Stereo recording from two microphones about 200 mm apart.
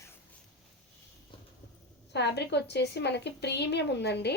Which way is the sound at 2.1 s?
60° left (ahead or behind).